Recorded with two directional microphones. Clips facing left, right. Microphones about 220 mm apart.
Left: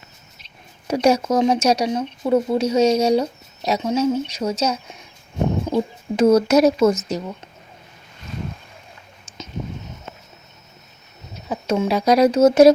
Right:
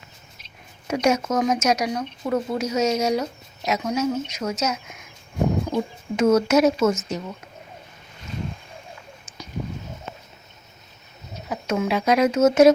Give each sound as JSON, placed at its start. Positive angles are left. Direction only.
{"t": 0.9, "sound": "speech", "side_deg": 35}
{"t": 6.1, "sound": "speech", "side_deg": 35}
{"t": 11.4, "sound": "speech", "side_deg": 30}